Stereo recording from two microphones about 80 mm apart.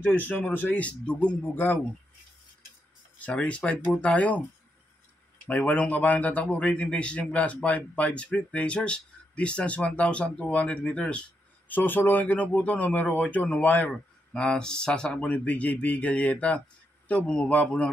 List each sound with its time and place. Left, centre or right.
0.0 s speech: left
1.5 s speech: left
3.2 s speech: centre
5.5 s speech: centre
14.3 s speech: centre